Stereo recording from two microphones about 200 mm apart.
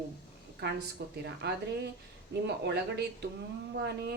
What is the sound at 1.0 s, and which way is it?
Speech, 55° right (ahead or behind).